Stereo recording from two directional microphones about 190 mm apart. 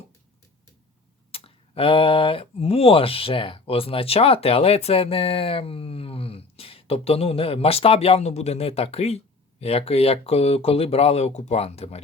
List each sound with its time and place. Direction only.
1.3 s speech: 30° left (ahead or behind)